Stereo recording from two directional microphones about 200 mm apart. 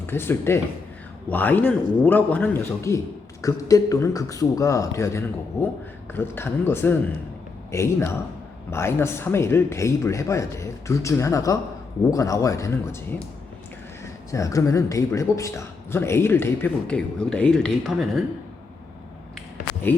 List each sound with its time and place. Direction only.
0.0 s a man's voice: 10° left (ahead or behind)
19.9 s a man's voice: 10° left (ahead or behind)